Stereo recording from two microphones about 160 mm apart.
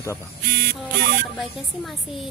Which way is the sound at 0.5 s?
60° right (ahead or behind).